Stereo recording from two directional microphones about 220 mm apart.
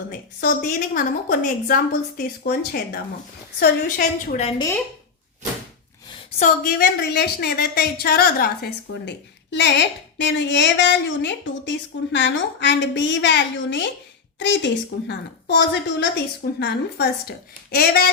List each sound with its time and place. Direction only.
0.1 s a woman's voice: 40° left (ahead or behind)
6.4 s a woman's voice: 40° left (ahead or behind)